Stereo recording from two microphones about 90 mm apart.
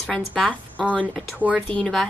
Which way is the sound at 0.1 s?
15° left (ahead or behind).